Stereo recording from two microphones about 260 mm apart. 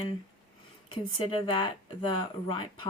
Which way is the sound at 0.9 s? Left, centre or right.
Centre.